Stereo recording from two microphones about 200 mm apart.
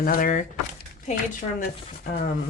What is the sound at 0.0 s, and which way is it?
Speech, 45° left (ahead or behind).